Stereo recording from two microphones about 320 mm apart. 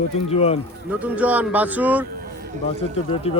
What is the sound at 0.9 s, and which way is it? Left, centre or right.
Speech, centre.